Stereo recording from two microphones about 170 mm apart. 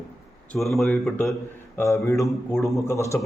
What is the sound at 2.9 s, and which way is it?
Speech, 15° left (ahead or behind).